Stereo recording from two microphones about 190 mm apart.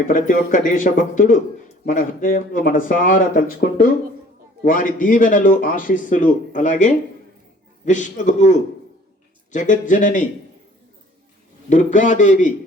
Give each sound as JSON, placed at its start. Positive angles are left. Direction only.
{"t": 0.1, "sound": "speech", "side_deg": 45}
{"t": 11.7, "sound": "speech", "side_deg": 40}